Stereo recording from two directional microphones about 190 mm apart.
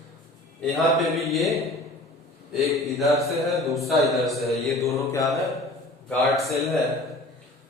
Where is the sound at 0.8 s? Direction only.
Centre (ahead or behind).